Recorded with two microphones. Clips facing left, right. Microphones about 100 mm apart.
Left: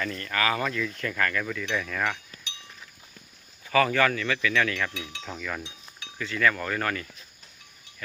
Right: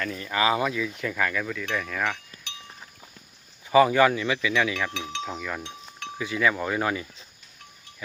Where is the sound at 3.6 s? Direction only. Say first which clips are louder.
Right 5 dB; 20° right (ahead or behind).